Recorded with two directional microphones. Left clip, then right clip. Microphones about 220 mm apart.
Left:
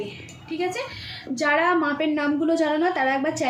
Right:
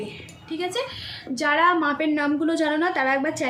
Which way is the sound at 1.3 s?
45° right (ahead or behind).